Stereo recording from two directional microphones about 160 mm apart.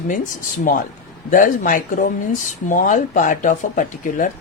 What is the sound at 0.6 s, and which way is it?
Speech, 60° left (ahead or behind).